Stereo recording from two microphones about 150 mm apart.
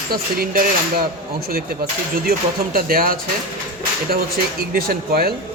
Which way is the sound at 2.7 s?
75° right (ahead or behind).